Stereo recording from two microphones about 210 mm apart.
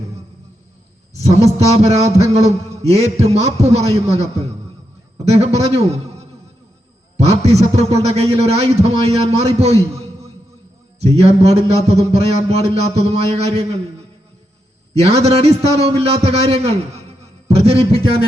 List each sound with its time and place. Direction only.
1.2 s a man's voice: 30° right (ahead or behind)
11.0 s a man's voice: 30° right (ahead or behind)
14.9 s a man's voice: 30° right (ahead or behind)